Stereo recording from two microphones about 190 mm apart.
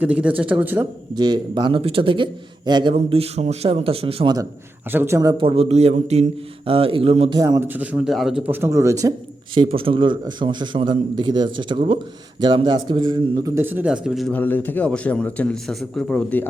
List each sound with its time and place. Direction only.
0.0 s a man's voice: 5° right (ahead or behind)
1.1 s a man's voice: 20° right (ahead or behind)
4.9 s a man's voice: 10° right (ahead or behind)
9.6 s a man's voice: 30° right (ahead or behind)
13.4 s a man's voice: 10° right (ahead or behind); by 16.5 s 5° left (ahead or behind)